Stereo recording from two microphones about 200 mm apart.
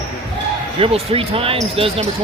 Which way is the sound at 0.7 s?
30° right (ahead or behind).